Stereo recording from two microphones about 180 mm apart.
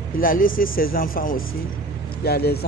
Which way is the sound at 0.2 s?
50° left (ahead or behind).